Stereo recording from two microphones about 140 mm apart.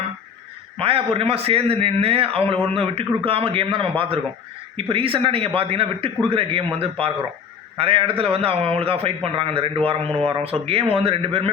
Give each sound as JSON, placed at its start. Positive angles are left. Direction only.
{"t": 0.8, "sound": "a man's voice", "side_deg": -45}
{"t": 7.8, "sound": "a man's voice", "side_deg": -40}